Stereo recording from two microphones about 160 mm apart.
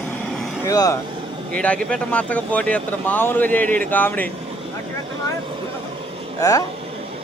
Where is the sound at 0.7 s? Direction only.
20° left (ahead or behind).